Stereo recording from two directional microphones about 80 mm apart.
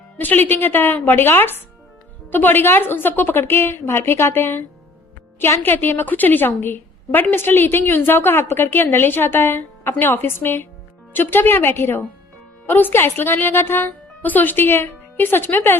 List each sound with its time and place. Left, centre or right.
0.2 s a woman's voice: left